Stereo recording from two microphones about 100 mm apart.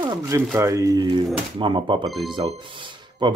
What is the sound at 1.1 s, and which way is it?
Speech, 55° right (ahead or behind).